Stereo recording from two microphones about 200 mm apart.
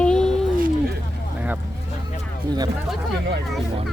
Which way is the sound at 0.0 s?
5° left (ahead or behind).